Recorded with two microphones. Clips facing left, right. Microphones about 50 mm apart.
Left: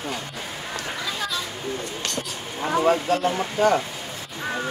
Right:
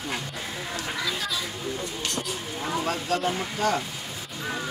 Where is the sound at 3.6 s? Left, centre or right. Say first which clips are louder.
Left 7 dB; left.